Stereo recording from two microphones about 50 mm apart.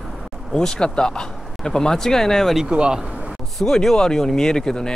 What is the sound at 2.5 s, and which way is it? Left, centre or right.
Speech, centre.